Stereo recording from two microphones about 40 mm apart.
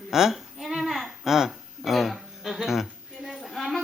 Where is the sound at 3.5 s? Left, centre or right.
Centre.